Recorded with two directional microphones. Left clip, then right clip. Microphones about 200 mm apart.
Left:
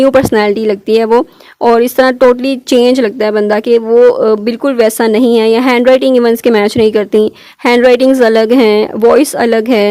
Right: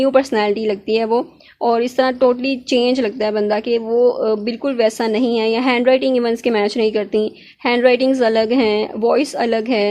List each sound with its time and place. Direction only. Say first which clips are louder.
0.0 s speech: left 7 dB; 45° left (ahead or behind)